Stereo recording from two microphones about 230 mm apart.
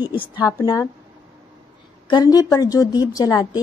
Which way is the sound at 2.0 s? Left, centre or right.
Centre.